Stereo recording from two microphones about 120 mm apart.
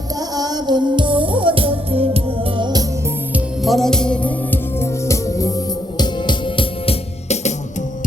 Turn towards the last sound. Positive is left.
turn(degrees=75)  # may be behind; listen again after turning